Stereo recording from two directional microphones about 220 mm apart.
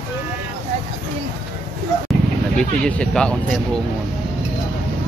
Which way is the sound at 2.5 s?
5° left (ahead or behind).